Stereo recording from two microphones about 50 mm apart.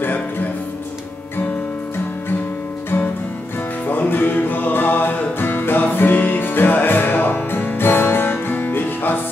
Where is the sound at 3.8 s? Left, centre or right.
Left.